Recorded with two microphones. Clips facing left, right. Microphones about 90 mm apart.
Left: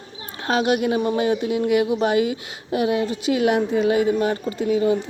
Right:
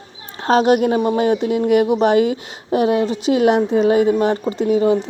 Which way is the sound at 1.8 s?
35° right (ahead or behind).